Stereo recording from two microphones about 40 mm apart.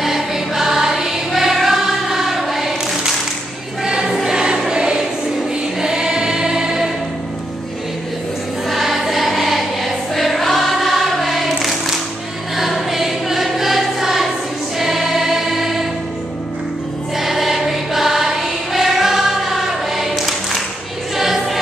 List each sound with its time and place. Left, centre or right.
0.0 s choir: centre
8.6 s choir: centre
17.2 s choir: centre
21.2 s music: centre